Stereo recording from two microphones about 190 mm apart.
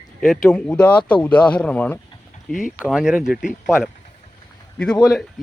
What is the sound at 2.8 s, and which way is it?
Speech, 5° right (ahead or behind).